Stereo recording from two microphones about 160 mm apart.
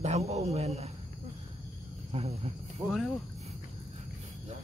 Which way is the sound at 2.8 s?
15° right (ahead or behind).